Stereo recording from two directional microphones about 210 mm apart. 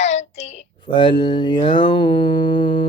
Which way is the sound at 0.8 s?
20° left (ahead or behind).